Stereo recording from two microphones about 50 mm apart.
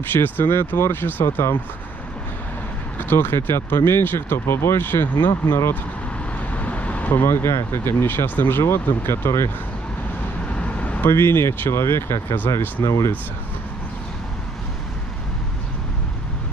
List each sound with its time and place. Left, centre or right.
0.1 s speech: left
1.4 s speech: left
3.0 s speech: left
6.5 s vehicle: left
7.2 s speech: left
10.5 s vehicle: left
11.1 s speech: left
12.4 s speech: left